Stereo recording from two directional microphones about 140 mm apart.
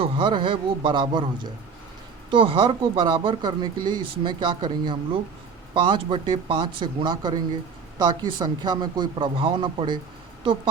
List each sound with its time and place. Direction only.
0.0 s speech: 35° right (ahead or behind)